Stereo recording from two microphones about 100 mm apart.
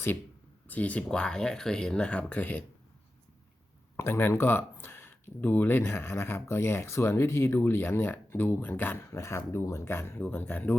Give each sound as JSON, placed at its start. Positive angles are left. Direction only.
{"t": 0.7, "sound": "speech", "side_deg": 15}
{"t": 3.9, "sound": "speech", "side_deg": 20}